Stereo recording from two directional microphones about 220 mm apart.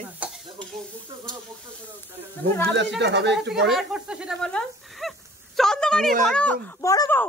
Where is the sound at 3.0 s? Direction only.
50° right (ahead or behind).